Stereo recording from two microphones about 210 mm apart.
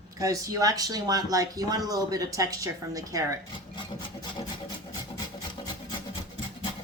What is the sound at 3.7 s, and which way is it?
Rub, 20° left (ahead or behind).